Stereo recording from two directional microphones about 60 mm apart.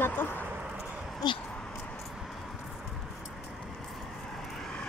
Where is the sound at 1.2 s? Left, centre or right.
Left.